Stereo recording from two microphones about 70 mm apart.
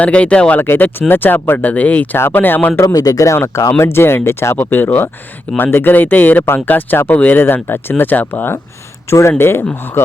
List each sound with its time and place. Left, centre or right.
0.0 s speech: centre
0.6 s speech: left
2.1 s speech: left
2.8 s speech: left
3.3 s speech: left
9.0 s speech: left